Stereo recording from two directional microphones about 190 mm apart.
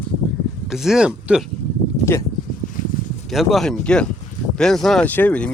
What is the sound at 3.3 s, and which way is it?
Speech, centre (ahead or behind).